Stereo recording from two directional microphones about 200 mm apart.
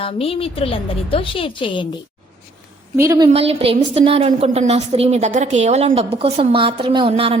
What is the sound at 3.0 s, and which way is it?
Speech, 15° right (ahead or behind).